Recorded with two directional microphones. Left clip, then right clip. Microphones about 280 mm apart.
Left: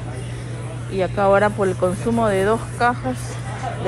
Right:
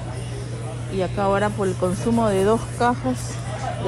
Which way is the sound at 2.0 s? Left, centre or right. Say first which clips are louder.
Even; centre.